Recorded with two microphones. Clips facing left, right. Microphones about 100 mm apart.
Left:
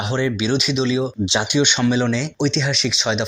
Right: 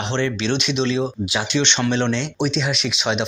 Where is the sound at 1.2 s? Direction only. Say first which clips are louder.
Left 2 dB; 20° left (ahead or behind).